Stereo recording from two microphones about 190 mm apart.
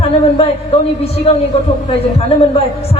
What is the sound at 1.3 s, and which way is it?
Speech, 30° left (ahead or behind).